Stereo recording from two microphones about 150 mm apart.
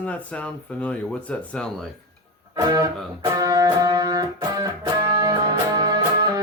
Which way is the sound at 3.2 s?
25° right (ahead or behind).